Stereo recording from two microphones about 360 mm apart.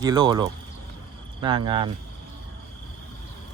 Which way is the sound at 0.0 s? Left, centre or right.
Centre.